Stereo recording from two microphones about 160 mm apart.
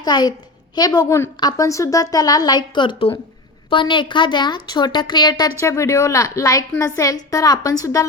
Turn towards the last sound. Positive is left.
turn(degrees=20)  # may be behind; listen again after turning